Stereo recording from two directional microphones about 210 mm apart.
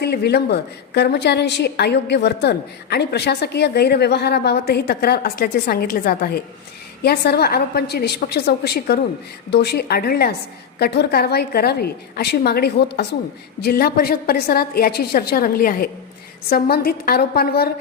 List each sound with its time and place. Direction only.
0.0 s a woman's voice: 50° left (ahead or behind)